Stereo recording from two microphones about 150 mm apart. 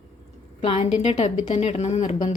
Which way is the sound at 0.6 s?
45° left (ahead or behind).